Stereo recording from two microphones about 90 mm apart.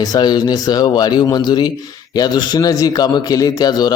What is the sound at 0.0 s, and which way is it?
A man's voice, 50° left (ahead or behind).